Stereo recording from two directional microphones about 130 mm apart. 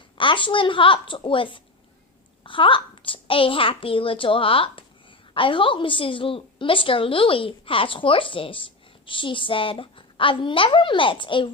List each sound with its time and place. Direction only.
0.2 s a woman's voice: 40° left (ahead or behind)